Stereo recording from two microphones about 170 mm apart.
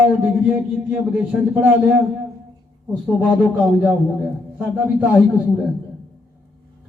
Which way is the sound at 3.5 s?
5° right (ahead or behind).